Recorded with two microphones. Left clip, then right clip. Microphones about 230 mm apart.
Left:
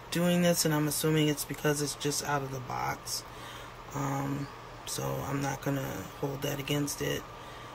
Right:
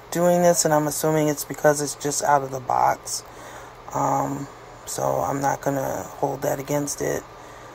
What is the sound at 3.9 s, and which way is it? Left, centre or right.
Dog, centre.